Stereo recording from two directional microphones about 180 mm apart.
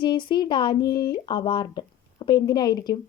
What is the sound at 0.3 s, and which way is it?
Speech, 25° left (ahead or behind).